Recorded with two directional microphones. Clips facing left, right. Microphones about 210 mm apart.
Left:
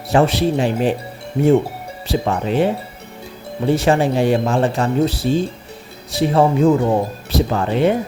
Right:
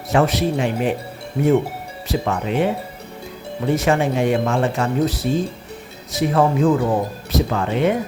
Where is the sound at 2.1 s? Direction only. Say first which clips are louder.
Left 2 dB; 30° left (ahead or behind).